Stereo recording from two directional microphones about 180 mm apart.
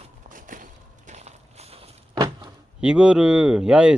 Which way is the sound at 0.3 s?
45° right (ahead or behind).